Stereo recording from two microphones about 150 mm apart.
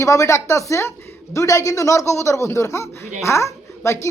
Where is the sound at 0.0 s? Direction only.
20° left (ahead or behind).